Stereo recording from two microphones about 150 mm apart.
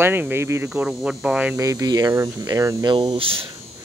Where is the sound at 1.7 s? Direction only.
25° right (ahead or behind).